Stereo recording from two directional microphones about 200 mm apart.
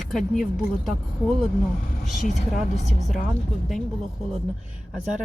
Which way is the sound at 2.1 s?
35° left (ahead or behind).